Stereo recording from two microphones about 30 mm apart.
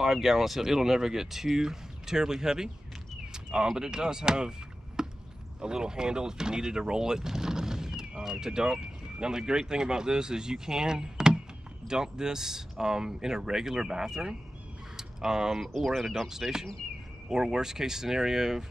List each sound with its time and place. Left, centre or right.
0.0 s speech: centre
15.0 s a sound: centre
15.8 s speech: centre
16.3 s speech: centre